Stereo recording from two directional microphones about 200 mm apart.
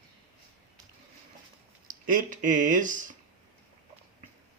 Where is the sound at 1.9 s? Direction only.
45° right (ahead or behind).